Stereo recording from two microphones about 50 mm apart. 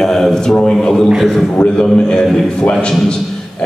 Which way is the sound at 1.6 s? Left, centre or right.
Centre.